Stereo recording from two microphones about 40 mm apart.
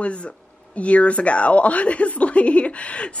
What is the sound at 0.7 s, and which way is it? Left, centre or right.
Speech, left.